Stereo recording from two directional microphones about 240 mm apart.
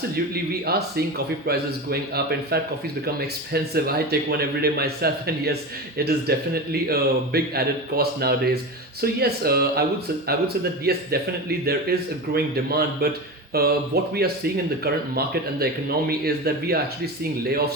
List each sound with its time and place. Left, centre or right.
0.6 s a man's voice: right